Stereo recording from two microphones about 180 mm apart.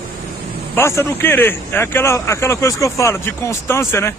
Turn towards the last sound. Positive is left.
turn(degrees=15)  # may be behind; listen again after turning